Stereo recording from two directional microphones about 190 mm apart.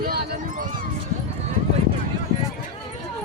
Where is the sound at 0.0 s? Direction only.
50° right (ahead or behind).